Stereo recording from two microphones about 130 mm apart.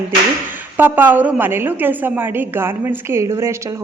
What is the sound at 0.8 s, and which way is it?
A woman's voice, 15° right (ahead or behind).